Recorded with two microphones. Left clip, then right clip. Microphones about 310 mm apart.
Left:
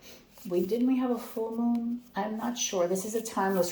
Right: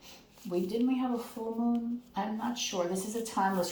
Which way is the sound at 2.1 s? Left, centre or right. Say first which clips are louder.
Left 2 dB; centre.